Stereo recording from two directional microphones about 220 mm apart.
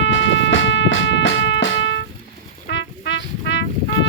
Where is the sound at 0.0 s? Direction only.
55° left (ahead or behind).